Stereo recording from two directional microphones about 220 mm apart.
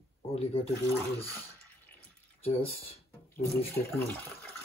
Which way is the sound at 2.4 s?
25° left (ahead or behind).